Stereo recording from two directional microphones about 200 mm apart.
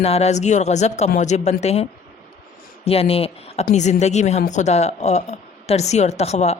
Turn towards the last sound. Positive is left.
turn(degrees=30)  # may be behind; listen again after turning